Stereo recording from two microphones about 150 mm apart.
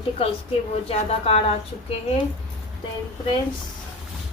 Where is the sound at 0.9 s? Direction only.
45° left (ahead or behind).